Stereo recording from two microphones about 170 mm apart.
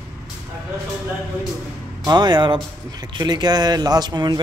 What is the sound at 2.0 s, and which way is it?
Speech, 25° right (ahead or behind).